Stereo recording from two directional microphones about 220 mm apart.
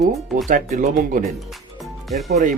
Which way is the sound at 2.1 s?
Centre (ahead or behind).